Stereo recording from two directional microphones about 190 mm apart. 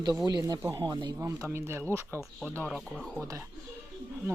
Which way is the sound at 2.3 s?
5° left (ahead or behind).